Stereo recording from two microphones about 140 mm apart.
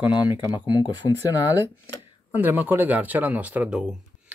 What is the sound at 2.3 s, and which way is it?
Speech, 15° right (ahead or behind).